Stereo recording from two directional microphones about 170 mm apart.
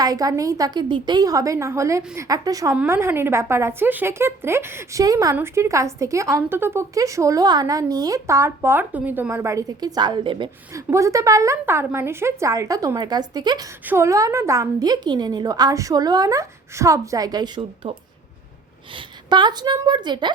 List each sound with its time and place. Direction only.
0.0 s a woman's voice: 20° right (ahead or behind)
10.7 s a woman's voice: 15° right (ahead or behind)
18.9 s a woman's voice: 25° right (ahead or behind)